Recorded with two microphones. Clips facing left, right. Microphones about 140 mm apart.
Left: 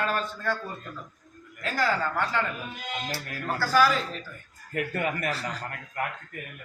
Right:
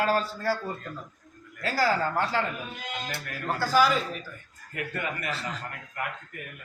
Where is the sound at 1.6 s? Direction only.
35° right (ahead or behind).